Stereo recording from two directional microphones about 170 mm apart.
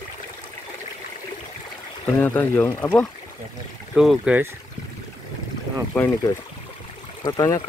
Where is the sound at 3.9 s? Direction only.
Centre (ahead or behind).